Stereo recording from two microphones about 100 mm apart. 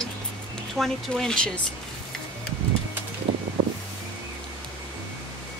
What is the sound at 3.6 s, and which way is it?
Wind, 70° right (ahead or behind).